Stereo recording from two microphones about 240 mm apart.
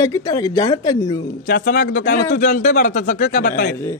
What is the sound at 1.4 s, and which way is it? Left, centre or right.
A man's voice, left.